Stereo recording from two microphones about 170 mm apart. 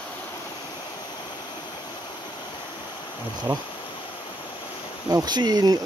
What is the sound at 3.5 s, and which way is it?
Speech, 15° right (ahead or behind).